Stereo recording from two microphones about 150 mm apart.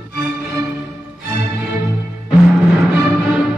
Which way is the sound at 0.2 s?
10° right (ahead or behind).